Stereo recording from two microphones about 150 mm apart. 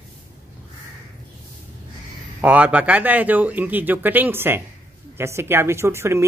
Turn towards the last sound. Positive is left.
turn(degrees=-15)  # may be behind; listen again after turning